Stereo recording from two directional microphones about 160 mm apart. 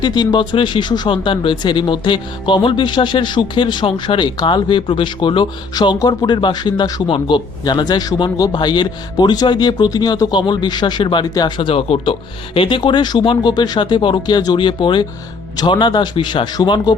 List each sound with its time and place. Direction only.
0.0 s speech: 25° left (ahead or behind)